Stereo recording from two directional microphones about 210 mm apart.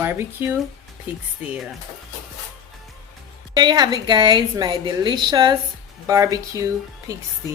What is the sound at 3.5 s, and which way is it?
A woman's voice, 20° right (ahead or behind).